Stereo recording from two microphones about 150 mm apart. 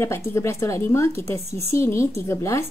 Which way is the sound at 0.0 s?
20° left (ahead or behind).